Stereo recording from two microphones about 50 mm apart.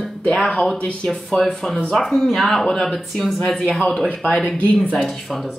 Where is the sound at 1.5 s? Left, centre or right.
Centre.